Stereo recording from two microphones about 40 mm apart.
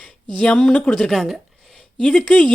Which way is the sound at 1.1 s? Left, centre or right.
Centre.